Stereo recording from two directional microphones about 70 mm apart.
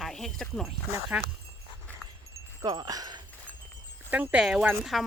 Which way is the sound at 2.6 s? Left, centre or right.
Right.